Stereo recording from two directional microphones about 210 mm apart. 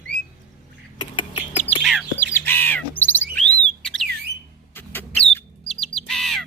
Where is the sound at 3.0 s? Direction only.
10° left (ahead or behind).